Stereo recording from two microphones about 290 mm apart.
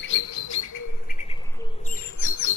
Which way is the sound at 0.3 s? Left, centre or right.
Left.